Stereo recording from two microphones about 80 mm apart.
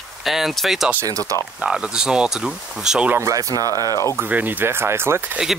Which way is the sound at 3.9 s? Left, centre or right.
Left.